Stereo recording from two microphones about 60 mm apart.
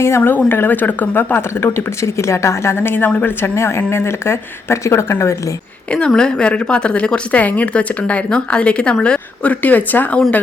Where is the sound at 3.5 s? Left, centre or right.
Left.